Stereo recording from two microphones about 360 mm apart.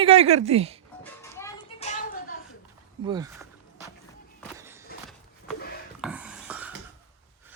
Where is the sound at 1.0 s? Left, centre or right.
Centre.